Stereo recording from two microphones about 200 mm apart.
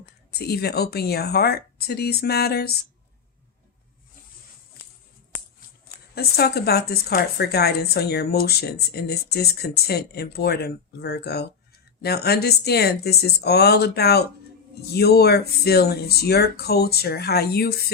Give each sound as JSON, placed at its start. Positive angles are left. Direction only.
{"t": 0.0, "sound": "a woman's voice", "side_deg": 50}
{"t": 6.1, "sound": "a woman's voice", "side_deg": 50}